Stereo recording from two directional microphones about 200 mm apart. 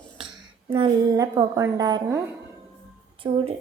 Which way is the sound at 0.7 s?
20° right (ahead or behind).